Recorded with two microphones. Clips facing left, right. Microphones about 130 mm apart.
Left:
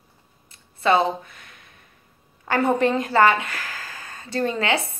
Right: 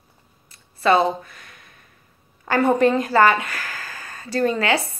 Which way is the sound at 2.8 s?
25° left (ahead or behind).